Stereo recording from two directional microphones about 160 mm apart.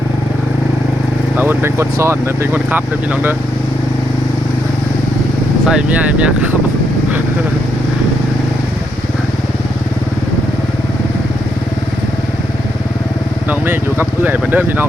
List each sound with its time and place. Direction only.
1.4 s speech: 15° right (ahead or behind)
5.6 s speech: 5° right (ahead or behind)
13.5 s speech: 10° right (ahead or behind)